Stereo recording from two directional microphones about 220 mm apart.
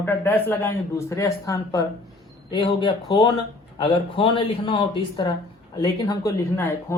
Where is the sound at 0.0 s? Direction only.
10° left (ahead or behind).